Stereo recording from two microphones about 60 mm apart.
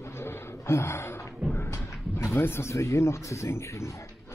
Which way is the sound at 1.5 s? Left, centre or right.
Left.